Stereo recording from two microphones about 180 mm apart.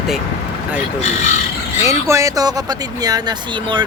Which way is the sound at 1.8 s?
15° right (ahead or behind).